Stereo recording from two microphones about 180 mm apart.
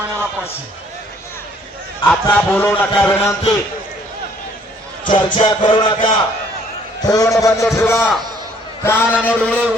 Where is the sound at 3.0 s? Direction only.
15° left (ahead or behind).